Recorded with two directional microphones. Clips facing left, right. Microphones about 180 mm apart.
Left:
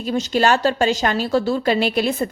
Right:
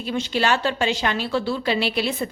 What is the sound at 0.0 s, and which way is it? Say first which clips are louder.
A woman's voice: left 5 dB; 40° left (ahead or behind).